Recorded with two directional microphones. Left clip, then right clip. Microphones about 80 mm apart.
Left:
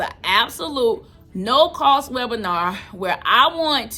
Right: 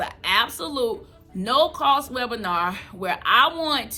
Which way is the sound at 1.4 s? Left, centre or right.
Left.